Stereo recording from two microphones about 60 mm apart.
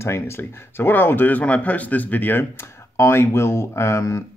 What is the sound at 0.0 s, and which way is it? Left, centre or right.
Speech, left.